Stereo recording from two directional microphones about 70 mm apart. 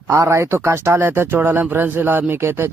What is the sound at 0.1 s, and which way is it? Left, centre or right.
A man's voice, right.